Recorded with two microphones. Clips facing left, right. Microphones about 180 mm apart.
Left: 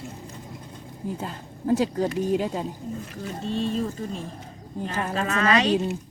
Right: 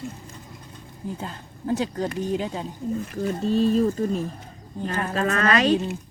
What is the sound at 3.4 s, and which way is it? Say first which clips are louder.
Speech: right 6 dB; 5° right (ahead or behind).